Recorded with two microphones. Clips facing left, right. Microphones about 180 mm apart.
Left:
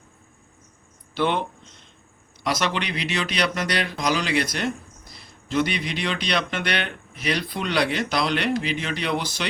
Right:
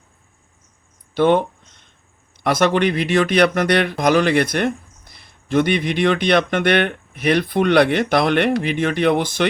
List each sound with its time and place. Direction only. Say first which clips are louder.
1.1 s speech: right 8 dB; 50° right (ahead or behind)